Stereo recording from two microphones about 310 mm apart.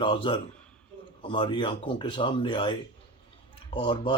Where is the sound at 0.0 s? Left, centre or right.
Centre.